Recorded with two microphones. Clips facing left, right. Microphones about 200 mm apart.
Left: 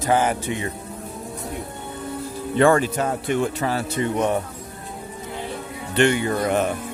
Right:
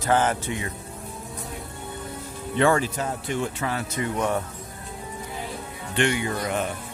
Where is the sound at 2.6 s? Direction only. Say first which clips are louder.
Left 4 dB; 55° left (ahead or behind).